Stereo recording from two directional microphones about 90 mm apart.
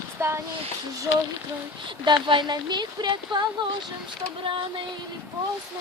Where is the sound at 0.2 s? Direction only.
25° right (ahead or behind).